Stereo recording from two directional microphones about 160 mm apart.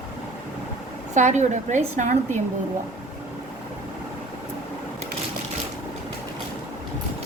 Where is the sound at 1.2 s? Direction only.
50° right (ahead or behind).